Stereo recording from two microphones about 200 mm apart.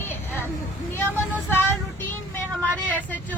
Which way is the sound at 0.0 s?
10° left (ahead or behind).